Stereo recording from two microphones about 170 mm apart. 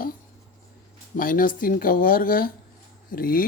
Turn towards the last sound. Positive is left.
turn(degrees=55)  # may be behind; listen again after turning